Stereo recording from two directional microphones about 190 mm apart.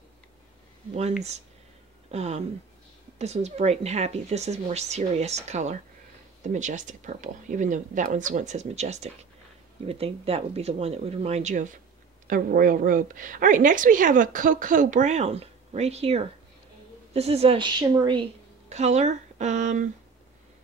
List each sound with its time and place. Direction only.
2.0 s a woman's voice: 35° right (ahead or behind)
18.7 s speech: 35° right (ahead or behind)